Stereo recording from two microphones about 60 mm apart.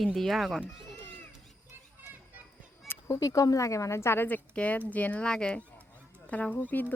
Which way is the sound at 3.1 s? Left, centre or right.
Left.